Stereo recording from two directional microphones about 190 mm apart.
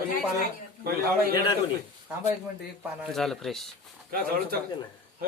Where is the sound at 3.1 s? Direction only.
Centre (ahead or behind).